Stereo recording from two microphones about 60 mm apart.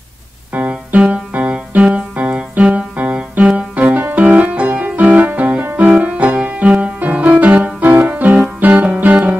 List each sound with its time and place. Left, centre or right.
0.5 s music: right